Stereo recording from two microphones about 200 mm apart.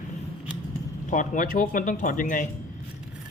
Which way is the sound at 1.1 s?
40° left (ahead or behind).